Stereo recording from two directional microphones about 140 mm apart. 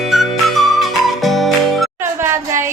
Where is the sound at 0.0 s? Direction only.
Centre (ahead or behind).